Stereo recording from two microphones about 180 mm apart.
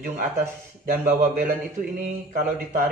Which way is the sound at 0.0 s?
55° right (ahead or behind).